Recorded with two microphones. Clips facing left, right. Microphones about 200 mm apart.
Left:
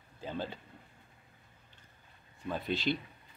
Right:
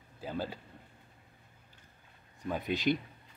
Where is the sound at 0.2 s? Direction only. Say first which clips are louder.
Right 1 dB; 10° right (ahead or behind).